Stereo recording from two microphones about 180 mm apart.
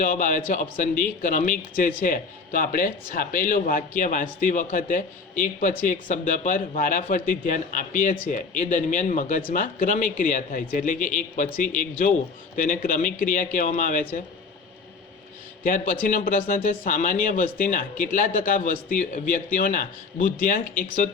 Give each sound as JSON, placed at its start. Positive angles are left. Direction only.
{"t": 0.0, "sound": "a man's voice", "side_deg": 45}
{"t": 15.6, "sound": "a man's voice", "side_deg": 45}